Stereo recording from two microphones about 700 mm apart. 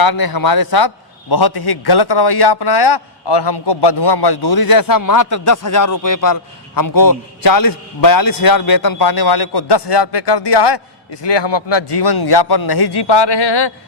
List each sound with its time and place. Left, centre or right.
0.0 s a man's voice: left